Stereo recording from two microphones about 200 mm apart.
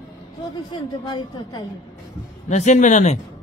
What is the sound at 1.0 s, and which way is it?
Speech, 20° left (ahead or behind).